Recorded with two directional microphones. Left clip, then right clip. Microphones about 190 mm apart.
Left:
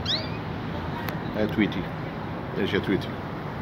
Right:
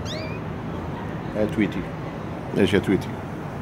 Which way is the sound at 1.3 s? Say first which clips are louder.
Right 2 dB; 15° right (ahead or behind).